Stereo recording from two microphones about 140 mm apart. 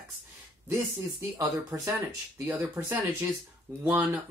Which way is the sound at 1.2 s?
20° right (ahead or behind).